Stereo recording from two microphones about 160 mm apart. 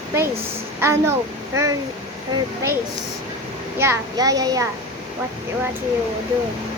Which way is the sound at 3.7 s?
15° right (ahead or behind).